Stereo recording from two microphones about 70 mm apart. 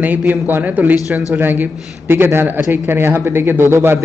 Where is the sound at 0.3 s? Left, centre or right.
Right.